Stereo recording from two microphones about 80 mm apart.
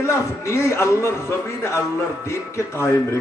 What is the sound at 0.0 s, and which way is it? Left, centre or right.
A man's voice, left.